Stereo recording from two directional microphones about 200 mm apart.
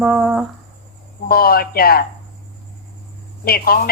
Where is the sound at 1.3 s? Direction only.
50° left (ahead or behind).